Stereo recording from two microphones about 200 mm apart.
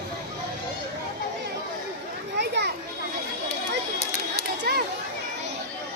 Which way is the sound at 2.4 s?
60° right (ahead or behind).